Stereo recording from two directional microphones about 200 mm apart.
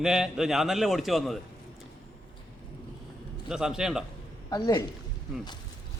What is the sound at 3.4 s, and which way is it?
Speech, 5° right (ahead or behind).